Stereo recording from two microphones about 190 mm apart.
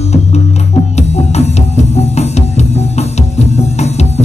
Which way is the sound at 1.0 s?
35° left (ahead or behind).